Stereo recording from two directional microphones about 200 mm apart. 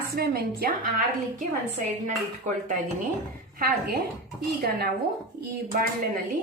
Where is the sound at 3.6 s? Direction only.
50° right (ahead or behind).